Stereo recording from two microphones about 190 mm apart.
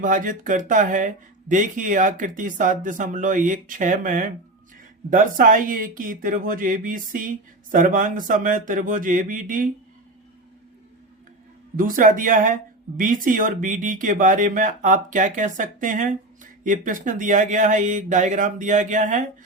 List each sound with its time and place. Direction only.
0.0 s speech: 45° right (ahead or behind)
11.8 s speech: 45° right (ahead or behind)